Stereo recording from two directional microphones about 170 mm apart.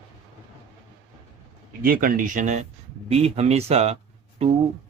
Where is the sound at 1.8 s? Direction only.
55° right (ahead or behind); by 3.9 s 40° right (ahead or behind).